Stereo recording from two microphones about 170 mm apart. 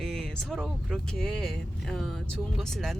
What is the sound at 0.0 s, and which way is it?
Speech, centre (ahead or behind).